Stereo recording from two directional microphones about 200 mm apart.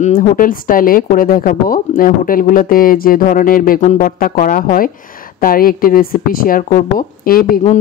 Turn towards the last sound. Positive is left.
turn(degrees=45)  # may be behind; listen again after turning